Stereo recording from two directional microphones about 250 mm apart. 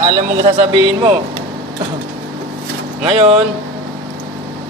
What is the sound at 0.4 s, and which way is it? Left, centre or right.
Speech, right.